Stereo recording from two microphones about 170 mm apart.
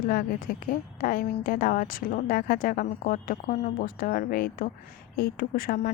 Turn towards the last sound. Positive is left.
turn(degrees=60)  # may be behind; listen again after turning